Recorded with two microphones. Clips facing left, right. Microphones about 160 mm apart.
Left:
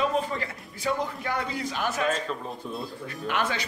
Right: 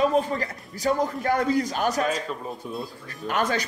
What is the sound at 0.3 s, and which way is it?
A man's voice, 40° right (ahead or behind).